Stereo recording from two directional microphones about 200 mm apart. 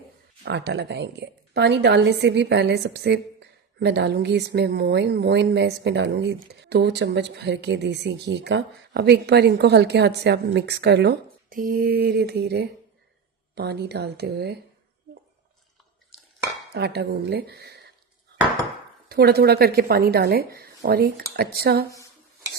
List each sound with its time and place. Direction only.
0.4 s a woman's voice: 60° right (ahead or behind)
16.7 s a woman's voice: 55° right (ahead or behind)
19.0 s a woman's voice: 50° right (ahead or behind)